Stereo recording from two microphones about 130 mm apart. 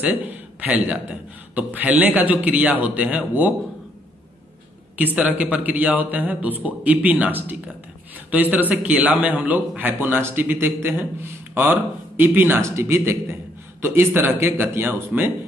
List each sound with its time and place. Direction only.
0.0 s a man's voice: 10° right (ahead or behind)
4.9 s a man's voice: 10° right (ahead or behind)